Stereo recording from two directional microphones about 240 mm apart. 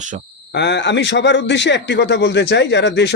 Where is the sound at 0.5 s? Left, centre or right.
Left.